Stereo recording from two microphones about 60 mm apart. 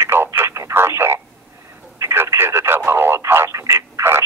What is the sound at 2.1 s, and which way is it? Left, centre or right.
Radio, right.